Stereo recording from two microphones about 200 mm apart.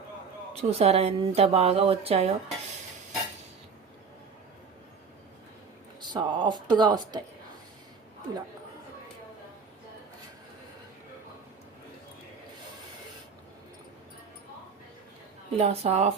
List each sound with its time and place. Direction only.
0.5 s speech: 30° right (ahead or behind)
6.0 s speech: 20° right (ahead or behind)
15.5 s speech: 30° right (ahead or behind)